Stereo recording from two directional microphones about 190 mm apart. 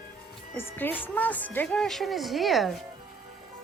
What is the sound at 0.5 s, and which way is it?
A woman's voice, 10° left (ahead or behind).